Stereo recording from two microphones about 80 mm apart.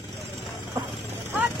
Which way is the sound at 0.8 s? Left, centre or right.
Right.